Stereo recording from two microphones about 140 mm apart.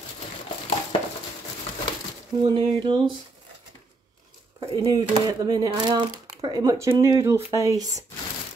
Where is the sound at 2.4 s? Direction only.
35° right (ahead or behind).